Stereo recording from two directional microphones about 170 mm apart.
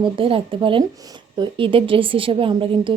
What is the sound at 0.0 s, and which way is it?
A woman's voice, 30° right (ahead or behind).